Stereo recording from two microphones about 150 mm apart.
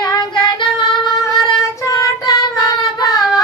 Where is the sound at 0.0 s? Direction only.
25° left (ahead or behind).